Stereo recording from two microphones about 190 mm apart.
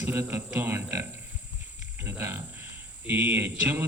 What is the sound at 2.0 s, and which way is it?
A man's voice, 15° right (ahead or behind).